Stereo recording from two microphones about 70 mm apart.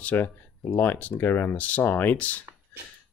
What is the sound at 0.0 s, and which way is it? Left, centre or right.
Speech, left.